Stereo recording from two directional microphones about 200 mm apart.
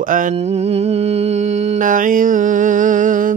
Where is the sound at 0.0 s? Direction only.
40° right (ahead or behind).